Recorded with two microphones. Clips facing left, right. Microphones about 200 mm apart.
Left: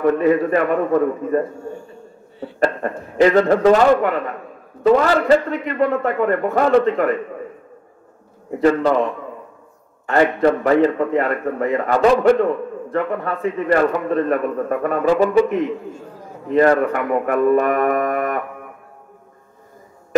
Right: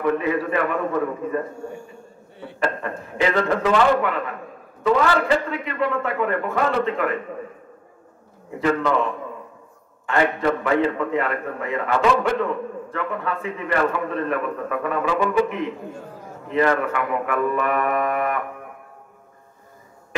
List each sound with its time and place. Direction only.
0.0 s speech: 45° left (ahead or behind)
2.6 s a man's voice: 40° left (ahead or behind)
8.5 s a man's voice: 40° left (ahead or behind)
10.0 s a man's voice: 40° left (ahead or behind)